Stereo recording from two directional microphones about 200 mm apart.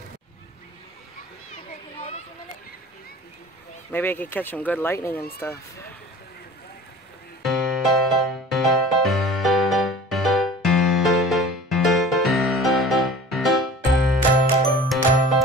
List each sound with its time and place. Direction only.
2.0 s a sound: 30° left (ahead or behind)
3.9 s speech: 10° left (ahead or behind)
7.4 s music: centre (ahead or behind)